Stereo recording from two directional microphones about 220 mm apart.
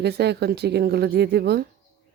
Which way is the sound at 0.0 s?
50° right (ahead or behind).